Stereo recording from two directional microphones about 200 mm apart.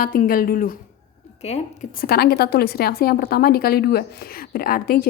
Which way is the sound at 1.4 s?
35° left (ahead or behind).